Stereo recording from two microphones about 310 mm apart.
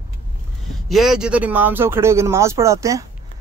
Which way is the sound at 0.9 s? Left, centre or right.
Centre.